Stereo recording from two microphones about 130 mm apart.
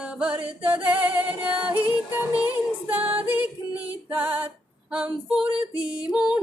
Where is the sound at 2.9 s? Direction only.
10° right (ahead or behind).